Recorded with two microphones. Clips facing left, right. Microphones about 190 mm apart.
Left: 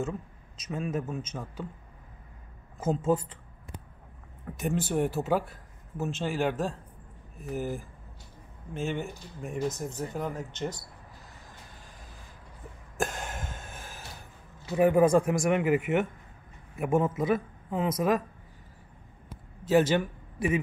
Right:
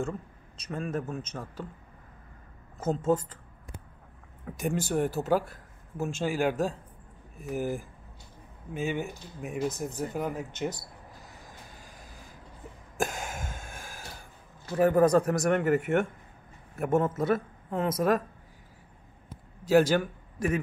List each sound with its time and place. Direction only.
0.0 s a man's voice: 5° left (ahead or behind)
2.8 s speech: 10° left (ahead or behind)
4.5 s a man's voice: centre (ahead or behind)
5.9 s a man's voice: 10° right (ahead or behind)
10.3 s speech: 15° right (ahead or behind)
12.9 s a sound: centre (ahead or behind)
14.7 s speech: 10° left (ahead or behind)
19.7 s a man's voice: 5° left (ahead or behind)